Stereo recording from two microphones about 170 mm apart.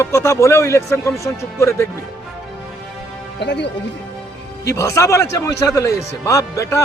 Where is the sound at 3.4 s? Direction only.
85° left.